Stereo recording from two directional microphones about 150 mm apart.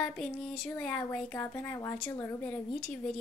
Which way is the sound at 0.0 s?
5° left (ahead or behind).